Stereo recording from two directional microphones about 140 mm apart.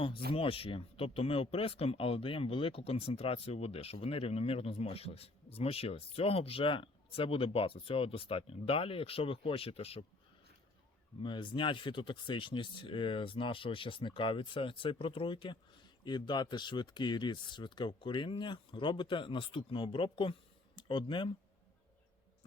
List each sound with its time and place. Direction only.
0.3 s speech: 40° left (ahead or behind)
11.2 s speech: 35° left (ahead or behind)